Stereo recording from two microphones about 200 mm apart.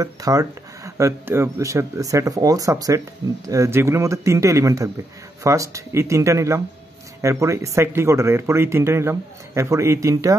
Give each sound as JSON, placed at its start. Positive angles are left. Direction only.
{"t": 0.0, "sound": "speech", "side_deg": -15}